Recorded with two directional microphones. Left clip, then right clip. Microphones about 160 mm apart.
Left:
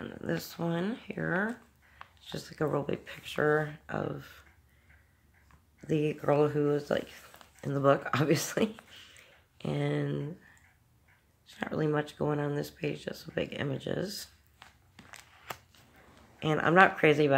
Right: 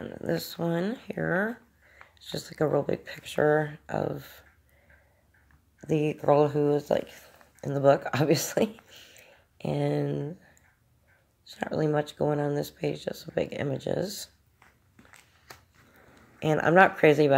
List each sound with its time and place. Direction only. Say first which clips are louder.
0.0 s speech: right 5 dB; 25° right (ahead or behind)
5.8 s speech: right 3 dB; 20° right (ahead or behind)
8.9 s a sound: right 2 dB; 20° right (ahead or behind)
11.4 s speech: right 4 dB; 25° right (ahead or behind)
16.3 s speech: right 3 dB; 25° right (ahead or behind)